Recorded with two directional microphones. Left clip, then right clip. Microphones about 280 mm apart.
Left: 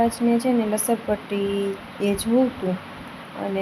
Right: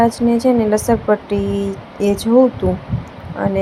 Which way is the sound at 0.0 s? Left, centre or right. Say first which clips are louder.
Right 7 dB; centre.